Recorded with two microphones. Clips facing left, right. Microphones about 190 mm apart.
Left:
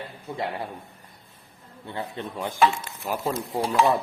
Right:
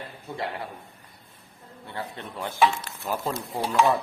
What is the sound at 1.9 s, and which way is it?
A man's voice, 15° left (ahead or behind).